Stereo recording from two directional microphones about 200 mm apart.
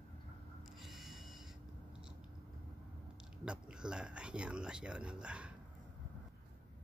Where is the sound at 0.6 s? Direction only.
Centre (ahead or behind).